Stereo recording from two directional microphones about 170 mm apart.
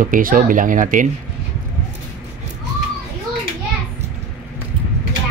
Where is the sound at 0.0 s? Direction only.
55° right (ahead or behind).